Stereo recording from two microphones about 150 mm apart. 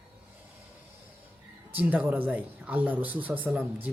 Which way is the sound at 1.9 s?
10° right (ahead or behind).